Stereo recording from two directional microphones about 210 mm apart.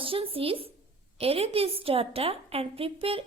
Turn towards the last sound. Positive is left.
turn(degrees=-25)  # may be behind; listen again after turning